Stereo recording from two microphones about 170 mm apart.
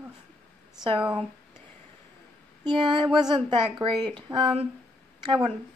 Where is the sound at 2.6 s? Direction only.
30° right (ahead or behind).